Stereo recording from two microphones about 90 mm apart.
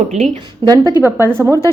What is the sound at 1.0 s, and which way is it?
Speech, 25° right (ahead or behind).